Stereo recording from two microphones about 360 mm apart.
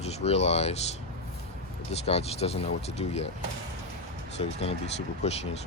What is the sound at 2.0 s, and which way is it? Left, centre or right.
Speech, centre.